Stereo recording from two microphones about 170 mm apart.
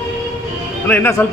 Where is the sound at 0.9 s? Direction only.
15° left (ahead or behind).